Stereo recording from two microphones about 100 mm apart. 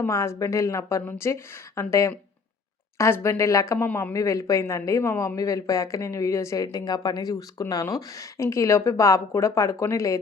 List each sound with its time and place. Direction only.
0.0 s speech: 30° left (ahead or behind)
3.8 s speech: 20° left (ahead or behind)
4.1 s speech: 30° left (ahead or behind)